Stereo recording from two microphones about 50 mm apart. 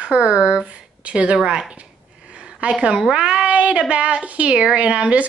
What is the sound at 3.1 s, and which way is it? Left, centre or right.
Speech, centre.